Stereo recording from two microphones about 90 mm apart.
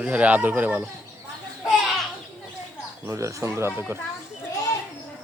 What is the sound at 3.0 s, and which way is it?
Speech, 35° right (ahead or behind).